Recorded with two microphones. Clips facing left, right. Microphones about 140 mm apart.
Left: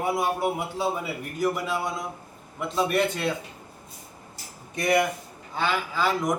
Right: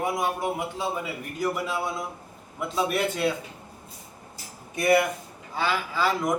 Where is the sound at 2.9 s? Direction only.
5° right (ahead or behind).